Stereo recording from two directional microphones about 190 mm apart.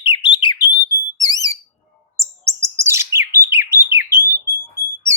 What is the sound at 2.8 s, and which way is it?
Bird, 15° right (ahead or behind).